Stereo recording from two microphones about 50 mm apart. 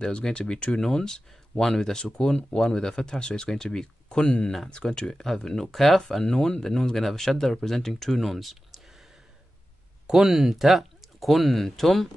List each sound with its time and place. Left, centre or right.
0.0 s speech: centre
0.7 s speech: centre
6.2 s speech: centre
10.0 s speech: centre